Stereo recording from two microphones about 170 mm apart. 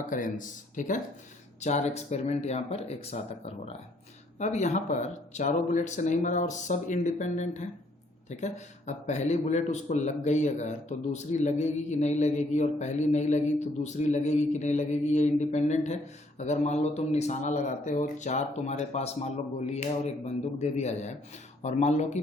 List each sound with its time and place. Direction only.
0.1 s a man's voice: 50° left (ahead or behind)